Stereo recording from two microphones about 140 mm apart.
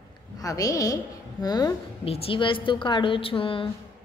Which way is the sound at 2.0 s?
45° left (ahead or behind).